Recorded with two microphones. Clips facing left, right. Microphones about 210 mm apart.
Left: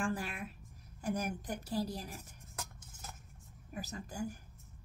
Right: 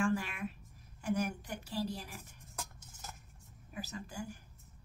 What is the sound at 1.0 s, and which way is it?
A woman's voice, 40° left (ahead or behind).